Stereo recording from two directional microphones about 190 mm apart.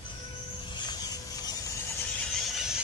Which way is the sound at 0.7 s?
20° left (ahead or behind).